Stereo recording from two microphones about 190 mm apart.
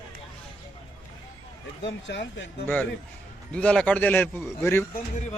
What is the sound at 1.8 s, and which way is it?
Speech, 70° left (ahead or behind).